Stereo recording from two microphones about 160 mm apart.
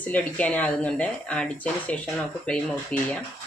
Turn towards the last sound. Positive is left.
turn(degrees=10)  # may be behind; listen again after turning